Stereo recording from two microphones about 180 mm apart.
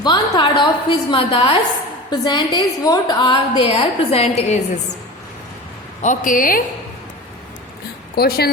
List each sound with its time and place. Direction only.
0.0 s a woman's voice: 25° left (ahead or behind)
6.0 s a woman's voice: 45° left (ahead or behind)
8.1 s a woman's voice: 60° left (ahead or behind)